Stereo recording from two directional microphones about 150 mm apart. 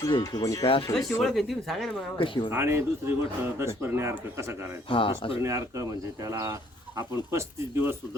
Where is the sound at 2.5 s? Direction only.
15° right (ahead or behind).